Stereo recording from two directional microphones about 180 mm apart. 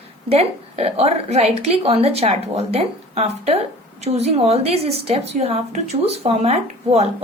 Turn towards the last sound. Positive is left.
turn(degrees=-35)  # may be behind; listen again after turning